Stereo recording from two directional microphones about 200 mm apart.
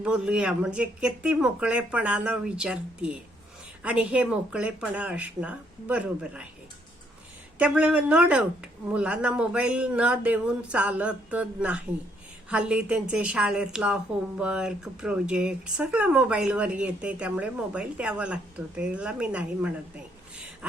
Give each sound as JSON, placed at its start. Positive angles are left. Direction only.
{"t": 0.0, "sound": "a woman's voice", "side_deg": -5}
{"t": 7.6, "sound": "a woman's voice", "side_deg": -5}